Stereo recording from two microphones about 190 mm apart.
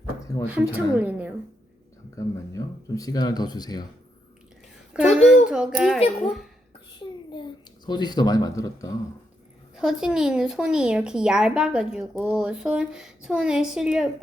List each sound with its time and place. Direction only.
0.4 s a woman's voice: 5° right (ahead or behind)
2.1 s speech: 15° left (ahead or behind)
4.9 s speech: 5° right (ahead or behind)
7.9 s speech: 20° left (ahead or behind)
9.7 s speech: 5° right (ahead or behind)